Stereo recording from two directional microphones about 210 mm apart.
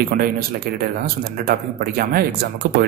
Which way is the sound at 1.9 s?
45° right (ahead or behind).